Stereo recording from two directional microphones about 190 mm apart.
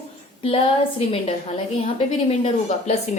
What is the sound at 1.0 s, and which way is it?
A woman's voice, 30° left (ahead or behind).